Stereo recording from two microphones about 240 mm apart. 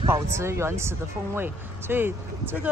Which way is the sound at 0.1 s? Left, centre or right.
Centre.